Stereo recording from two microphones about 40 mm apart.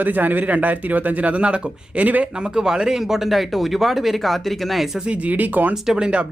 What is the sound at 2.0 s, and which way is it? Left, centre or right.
Speech, right.